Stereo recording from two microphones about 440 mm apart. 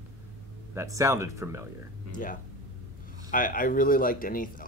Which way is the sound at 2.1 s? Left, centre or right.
Centre.